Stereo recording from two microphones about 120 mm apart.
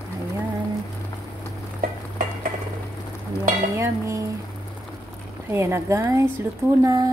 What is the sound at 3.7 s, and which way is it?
Cutlery, 25° right (ahead or behind).